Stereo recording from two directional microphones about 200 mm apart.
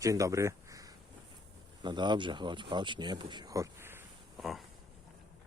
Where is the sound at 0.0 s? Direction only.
15° right (ahead or behind).